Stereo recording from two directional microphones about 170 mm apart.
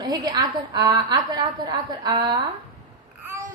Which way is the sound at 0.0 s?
25° right (ahead or behind).